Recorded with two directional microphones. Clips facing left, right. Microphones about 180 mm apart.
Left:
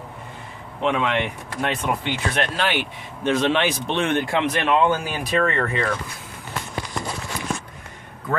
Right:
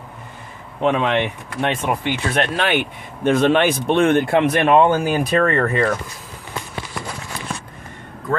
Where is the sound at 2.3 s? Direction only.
55° right (ahead or behind).